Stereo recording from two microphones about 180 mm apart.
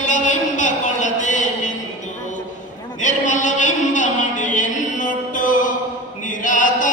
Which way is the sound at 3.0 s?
45° left (ahead or behind).